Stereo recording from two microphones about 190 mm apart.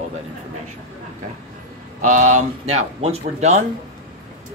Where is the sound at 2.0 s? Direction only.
40° right (ahead or behind).